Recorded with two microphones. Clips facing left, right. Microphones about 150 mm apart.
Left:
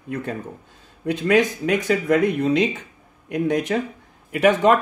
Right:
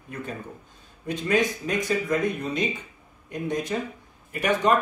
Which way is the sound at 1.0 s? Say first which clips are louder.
Left 6 dB; 75° left (ahead or behind).